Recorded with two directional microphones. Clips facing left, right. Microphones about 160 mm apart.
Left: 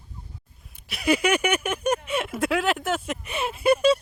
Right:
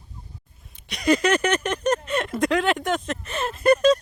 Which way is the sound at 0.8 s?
5° left (ahead or behind).